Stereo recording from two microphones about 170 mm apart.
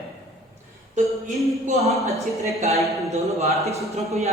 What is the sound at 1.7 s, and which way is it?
Speech, 40° right (ahead or behind).